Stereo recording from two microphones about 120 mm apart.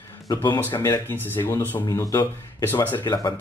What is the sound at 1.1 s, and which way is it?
Speech, 15° left (ahead or behind).